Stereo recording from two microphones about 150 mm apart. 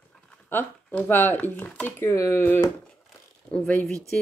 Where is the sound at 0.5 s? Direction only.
10° left (ahead or behind).